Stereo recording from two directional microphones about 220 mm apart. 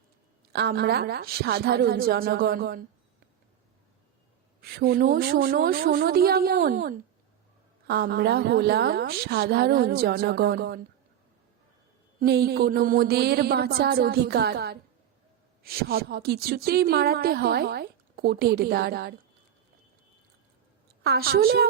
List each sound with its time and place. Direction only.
0.5 s speech: 45° right (ahead or behind)
4.6 s speech: 45° right (ahead or behind)
12.2 s speech: 45° right (ahead or behind)
21.0 s speech: 45° right (ahead or behind)